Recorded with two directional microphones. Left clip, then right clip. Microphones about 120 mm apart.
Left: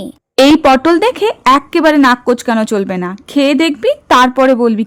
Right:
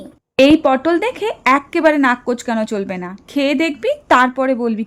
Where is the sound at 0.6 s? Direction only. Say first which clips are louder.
Left 6 dB; 40° left (ahead or behind).